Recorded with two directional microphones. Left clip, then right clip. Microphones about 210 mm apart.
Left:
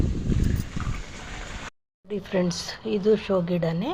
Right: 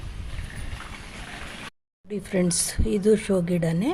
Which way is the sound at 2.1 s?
20° right (ahead or behind).